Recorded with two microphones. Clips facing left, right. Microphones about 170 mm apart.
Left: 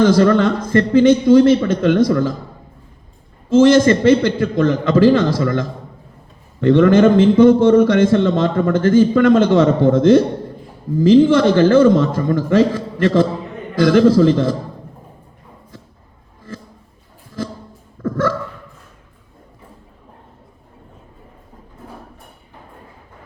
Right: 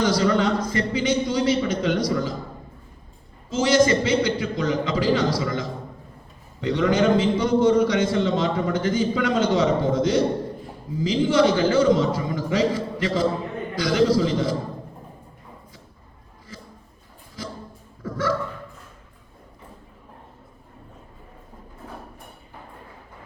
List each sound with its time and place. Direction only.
0.0 s a man's voice: 55° left (ahead or behind)
3.5 s a man's voice: 50° left (ahead or behind)
18.0 s a sound: 50° left (ahead or behind)